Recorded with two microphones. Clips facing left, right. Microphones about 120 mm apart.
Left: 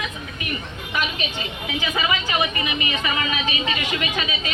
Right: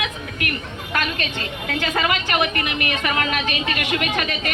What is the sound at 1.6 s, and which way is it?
A woman's voice, 65° right (ahead or behind).